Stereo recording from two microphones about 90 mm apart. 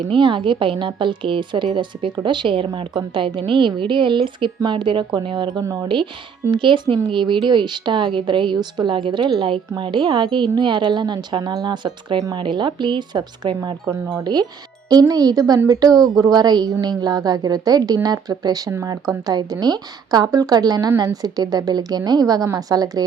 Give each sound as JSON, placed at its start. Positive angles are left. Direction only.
{"t": 0.1, "sound": "a woman's voice", "side_deg": -70}
{"t": 14.8, "sound": "a woman's voice", "side_deg": -45}